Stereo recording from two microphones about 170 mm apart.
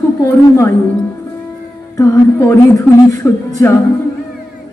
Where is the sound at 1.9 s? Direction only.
20° left (ahead or behind).